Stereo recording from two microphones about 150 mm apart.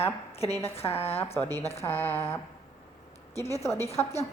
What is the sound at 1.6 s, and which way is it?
Speech, 45° left (ahead or behind).